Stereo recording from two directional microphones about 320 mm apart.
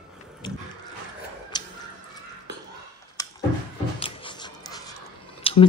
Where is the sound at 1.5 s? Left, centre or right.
Centre.